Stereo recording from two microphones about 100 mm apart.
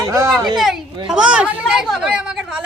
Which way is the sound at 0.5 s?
Centre (ahead or behind).